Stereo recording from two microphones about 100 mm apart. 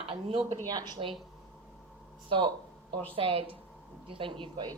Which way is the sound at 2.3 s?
55° right (ahead or behind).